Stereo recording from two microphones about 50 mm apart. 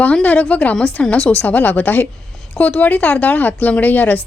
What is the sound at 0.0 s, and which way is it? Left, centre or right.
A woman's voice, left.